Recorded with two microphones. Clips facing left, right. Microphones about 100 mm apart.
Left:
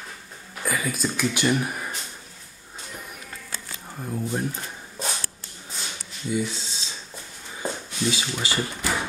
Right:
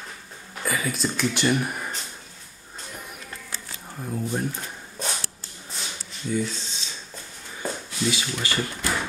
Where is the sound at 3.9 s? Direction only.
Centre (ahead or behind).